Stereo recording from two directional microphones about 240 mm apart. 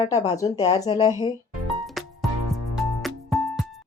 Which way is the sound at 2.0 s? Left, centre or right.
Centre.